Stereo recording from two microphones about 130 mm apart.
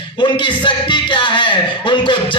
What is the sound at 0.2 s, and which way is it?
Speech, 40° left (ahead or behind).